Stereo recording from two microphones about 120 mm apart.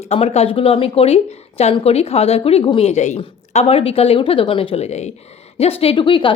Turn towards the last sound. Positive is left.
turn(degrees=45)  # may be behind; listen again after turning